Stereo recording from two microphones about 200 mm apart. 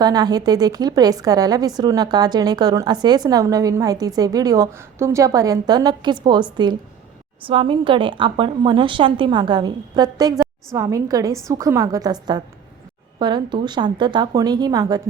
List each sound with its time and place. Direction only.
0.0 s a woman's voice: 20° right (ahead or behind)